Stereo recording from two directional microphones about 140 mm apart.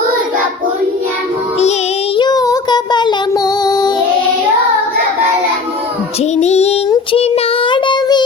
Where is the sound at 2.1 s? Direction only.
30° left (ahead or behind).